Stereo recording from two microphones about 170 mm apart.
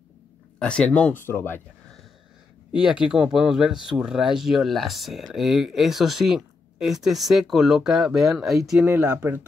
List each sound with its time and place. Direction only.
0.6 s speech: 5° left (ahead or behind)
2.8 s speech: 5° right (ahead or behind)